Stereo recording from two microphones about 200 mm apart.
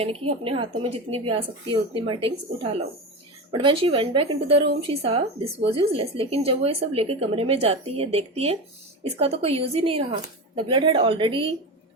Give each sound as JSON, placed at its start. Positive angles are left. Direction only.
{"t": 0.0, "sound": "speech", "side_deg": -30}